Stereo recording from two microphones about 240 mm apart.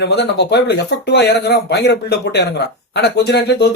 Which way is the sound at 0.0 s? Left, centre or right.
Left.